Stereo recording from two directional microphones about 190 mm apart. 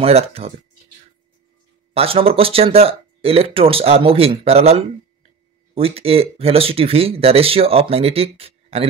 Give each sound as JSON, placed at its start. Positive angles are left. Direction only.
{"t": 0.0, "sound": "speech", "side_deg": -30}
{"t": 2.0, "sound": "speech", "side_deg": -30}